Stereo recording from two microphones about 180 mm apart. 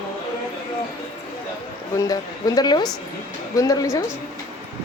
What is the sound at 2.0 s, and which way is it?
A woman's voice, 20° left (ahead or behind).